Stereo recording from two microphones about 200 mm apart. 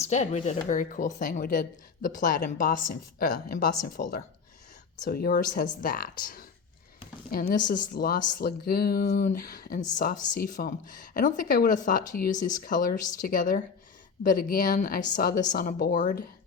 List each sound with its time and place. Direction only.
0.0 s speech: 35° left (ahead or behind)